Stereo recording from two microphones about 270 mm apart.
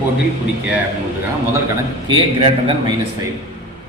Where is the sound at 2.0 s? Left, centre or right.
Centre.